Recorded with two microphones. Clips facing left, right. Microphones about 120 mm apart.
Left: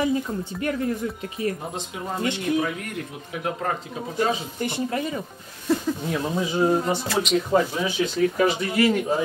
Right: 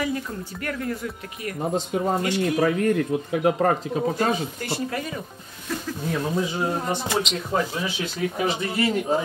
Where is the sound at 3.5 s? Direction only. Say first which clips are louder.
Right 7 dB; 50° right (ahead or behind).